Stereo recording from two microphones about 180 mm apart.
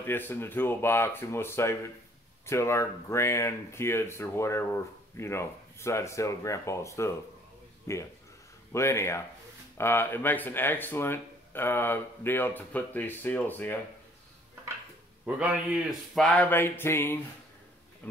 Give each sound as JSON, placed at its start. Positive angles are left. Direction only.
{"t": 0.0, "sound": "speech", "side_deg": 10}
{"t": 15.2, "sound": "speech", "side_deg": -5}
{"t": 16.3, "sound": "speech", "side_deg": 10}